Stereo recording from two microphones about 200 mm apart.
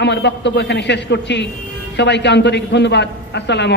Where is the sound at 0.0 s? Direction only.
60° left (ahead or behind).